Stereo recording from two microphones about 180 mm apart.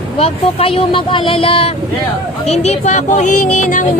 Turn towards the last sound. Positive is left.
turn(degrees=45)  # may be behind; listen again after turning